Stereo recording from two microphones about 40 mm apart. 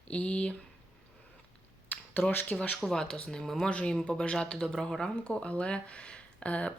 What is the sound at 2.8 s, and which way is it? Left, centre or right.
Speech, centre.